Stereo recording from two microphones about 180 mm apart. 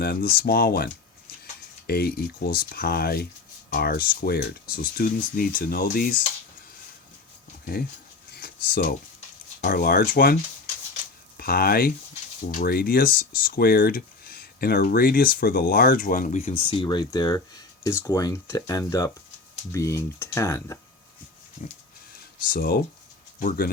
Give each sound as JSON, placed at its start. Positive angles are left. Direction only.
{"t": 0.0, "sound": "speech", "side_deg": 55}
{"t": 1.9, "sound": "speech", "side_deg": 60}
{"t": 8.3, "sound": "a sound", "side_deg": 55}
{"t": 9.6, "sound": "speech", "side_deg": 55}
{"t": 11.3, "sound": "speech", "side_deg": 55}
{"t": 16.6, "sound": "speech", "side_deg": 30}
{"t": 22.4, "sound": "speech", "side_deg": 55}